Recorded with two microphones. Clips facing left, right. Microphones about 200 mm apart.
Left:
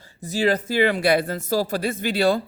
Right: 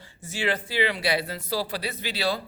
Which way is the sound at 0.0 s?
40° left (ahead or behind).